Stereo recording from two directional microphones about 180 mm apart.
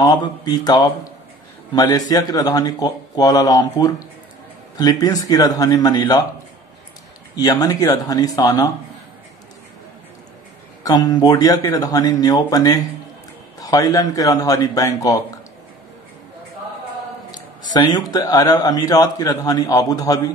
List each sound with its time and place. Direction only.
0.0 s a man's voice: 20° left (ahead or behind)
7.3 s a man's voice: 20° left (ahead or behind)
10.8 s a man's voice: 20° left (ahead or behind)
17.7 s a man's voice: 20° left (ahead or behind)